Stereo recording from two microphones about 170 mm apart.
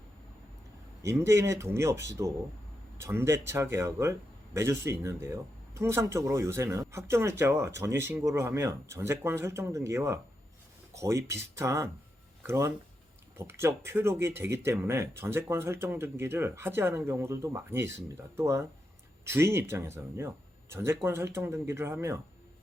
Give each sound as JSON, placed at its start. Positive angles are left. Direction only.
{"t": 1.0, "sound": "speech", "side_deg": -15}